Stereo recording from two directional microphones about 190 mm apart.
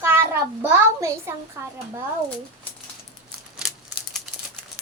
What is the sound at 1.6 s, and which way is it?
Speech, 15° right (ahead or behind).